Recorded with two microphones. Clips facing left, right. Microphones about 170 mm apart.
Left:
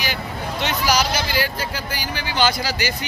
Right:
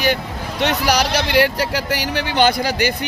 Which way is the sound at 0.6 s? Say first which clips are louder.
Right 4 dB; 65° right (ahead or behind).